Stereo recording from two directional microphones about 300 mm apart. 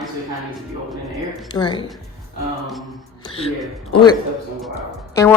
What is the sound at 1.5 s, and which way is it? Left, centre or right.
Speech, centre.